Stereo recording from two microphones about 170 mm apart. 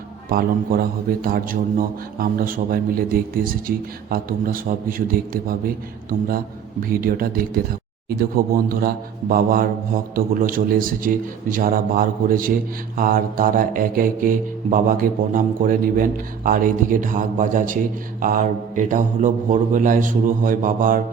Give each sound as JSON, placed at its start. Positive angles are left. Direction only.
{"t": 0.3, "sound": "a man's voice", "side_deg": -60}